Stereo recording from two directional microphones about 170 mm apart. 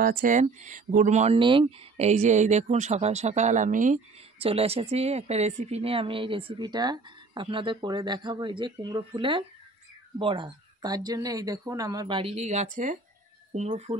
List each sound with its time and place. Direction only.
0.0 s speech: 55° right (ahead or behind)
1.4 s speech: 30° right (ahead or behind); by 4.0 s 50° right (ahead or behind)
4.4 s a woman's voice: 35° right (ahead or behind)